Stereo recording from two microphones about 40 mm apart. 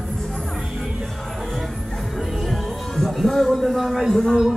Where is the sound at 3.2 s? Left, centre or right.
Centre.